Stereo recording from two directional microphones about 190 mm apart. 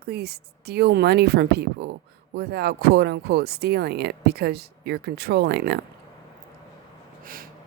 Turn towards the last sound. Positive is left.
turn(degrees=-60)  # may be behind; listen again after turning